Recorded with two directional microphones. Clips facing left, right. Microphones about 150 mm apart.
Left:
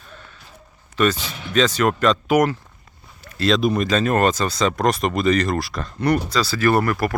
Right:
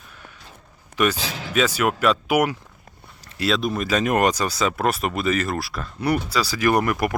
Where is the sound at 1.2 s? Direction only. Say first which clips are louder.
Right 2 dB; 90° right.